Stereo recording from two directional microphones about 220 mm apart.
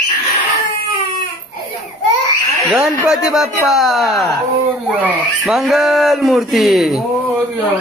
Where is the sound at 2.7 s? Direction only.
5° right (ahead or behind).